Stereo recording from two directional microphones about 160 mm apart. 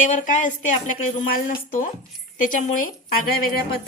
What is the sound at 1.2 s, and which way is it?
A woman's voice, 65° left (ahead or behind).